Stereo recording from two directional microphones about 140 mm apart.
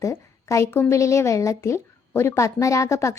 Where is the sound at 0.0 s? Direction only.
20° left (ahead or behind).